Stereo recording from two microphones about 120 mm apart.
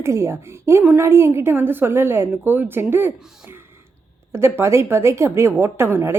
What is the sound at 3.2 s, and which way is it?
Speech, 5° right (ahead or behind).